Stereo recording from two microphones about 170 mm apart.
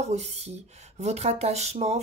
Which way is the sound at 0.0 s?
40° right (ahead or behind).